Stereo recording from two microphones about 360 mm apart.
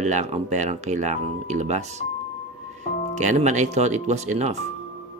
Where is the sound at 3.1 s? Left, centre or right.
Centre.